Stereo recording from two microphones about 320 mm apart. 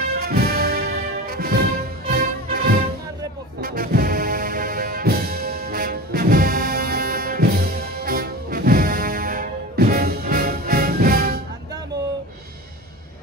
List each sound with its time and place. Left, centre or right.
0.0 s music: right